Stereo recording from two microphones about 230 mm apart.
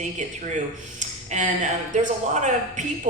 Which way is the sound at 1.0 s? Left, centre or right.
Right.